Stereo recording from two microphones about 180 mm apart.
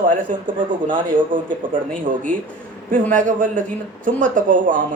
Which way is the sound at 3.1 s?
45° right (ahead or behind).